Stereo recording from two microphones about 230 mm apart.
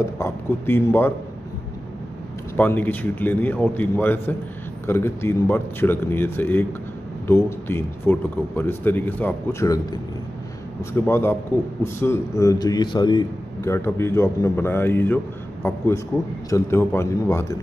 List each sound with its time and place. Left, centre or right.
0.0 s speech: centre
2.5 s speech: centre
16.4 s speech: centre